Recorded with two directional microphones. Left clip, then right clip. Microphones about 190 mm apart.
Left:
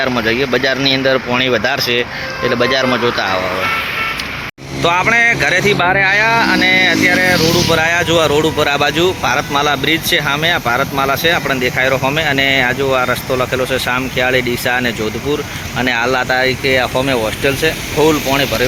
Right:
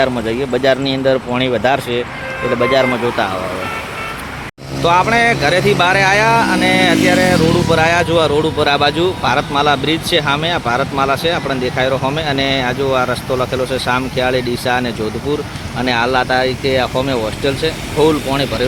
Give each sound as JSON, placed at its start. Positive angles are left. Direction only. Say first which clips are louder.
{"t": 0.0, "sound": "speech", "louder": "left 1 dB", "side_deg": 0}
{"t": 4.8, "sound": "speech", "louder": "even", "side_deg": 0}